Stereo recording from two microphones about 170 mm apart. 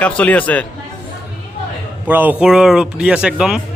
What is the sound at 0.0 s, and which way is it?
Speech, 10° left (ahead or behind).